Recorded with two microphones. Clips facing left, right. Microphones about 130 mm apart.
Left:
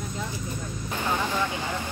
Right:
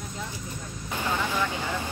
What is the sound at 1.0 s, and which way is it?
Vehicle, 15° left (ahead or behind).